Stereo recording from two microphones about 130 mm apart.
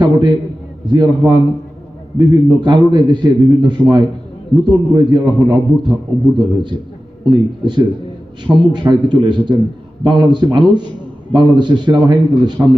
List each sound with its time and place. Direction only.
0.0 s a man's voice: 35° right (ahead or behind)
12.6 s a man's voice: 20° right (ahead or behind)